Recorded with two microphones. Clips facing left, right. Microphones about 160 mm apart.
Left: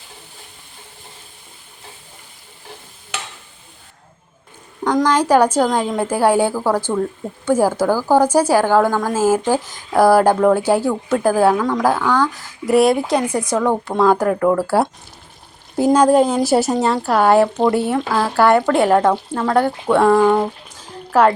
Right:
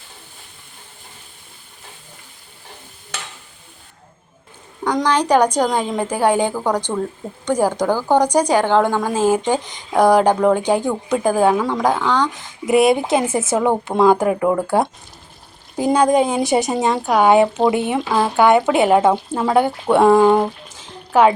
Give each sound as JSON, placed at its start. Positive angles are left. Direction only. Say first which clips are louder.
{"t": 4.8, "sound": "a woman's voice", "louder": "left 2 dB", "side_deg": 0}
{"t": 13.5, "sound": "speech", "louder": "right 1 dB", "side_deg": -10}
{"t": 14.6, "sound": "a woman's voice", "louder": "left 1 dB", "side_deg": 5}
{"t": 20.7, "sound": "a sound", "louder": "even", "side_deg": 0}